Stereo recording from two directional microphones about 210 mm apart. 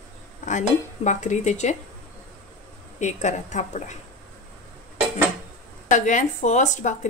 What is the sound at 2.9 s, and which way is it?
A woman's voice, 35° left (ahead or behind).